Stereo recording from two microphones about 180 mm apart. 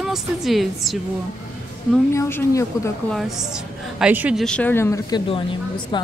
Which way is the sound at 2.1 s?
15° left (ahead or behind).